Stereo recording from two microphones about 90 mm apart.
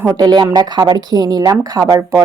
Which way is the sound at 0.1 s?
50° right (ahead or behind).